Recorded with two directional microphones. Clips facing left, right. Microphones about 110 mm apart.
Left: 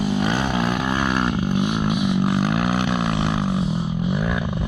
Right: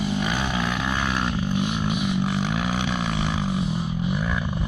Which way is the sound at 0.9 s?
45° left (ahead or behind).